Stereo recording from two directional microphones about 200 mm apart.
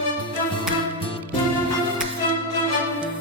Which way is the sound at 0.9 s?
25° left (ahead or behind).